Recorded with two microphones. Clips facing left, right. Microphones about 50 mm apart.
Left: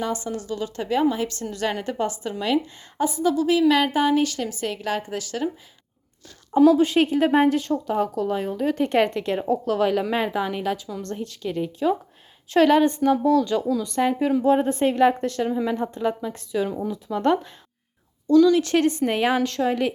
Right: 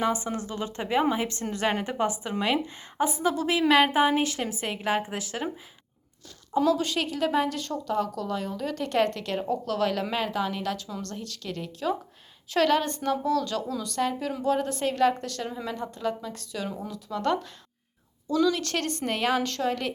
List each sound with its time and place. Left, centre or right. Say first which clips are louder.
0.0 s a woman's voice: even; right
3.7 s a woman's voice: left 1 dB; centre
6.7 s a woman's voice: left 9 dB; left
7.6 s a woman's voice: left 5 dB; centre
16.9 s a woman's voice: left 4 dB; left
18.3 s a woman's voice: left 8 dB; centre
18.5 s a woman's voice: left 10 dB; centre